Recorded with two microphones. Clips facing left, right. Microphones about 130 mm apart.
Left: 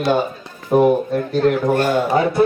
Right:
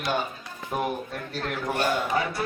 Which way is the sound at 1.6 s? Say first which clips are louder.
Left 10 dB; 50° left (ahead or behind).